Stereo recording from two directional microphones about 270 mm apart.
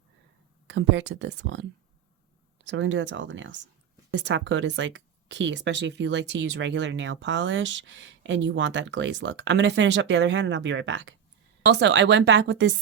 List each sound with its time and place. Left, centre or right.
0.7 s speech: right
2.6 s speech: right